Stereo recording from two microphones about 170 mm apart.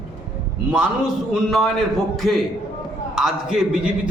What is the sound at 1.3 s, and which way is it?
A man's voice, centre (ahead or behind).